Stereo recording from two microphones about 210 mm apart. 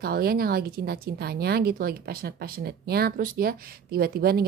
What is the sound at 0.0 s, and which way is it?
Speech, 45° right (ahead or behind).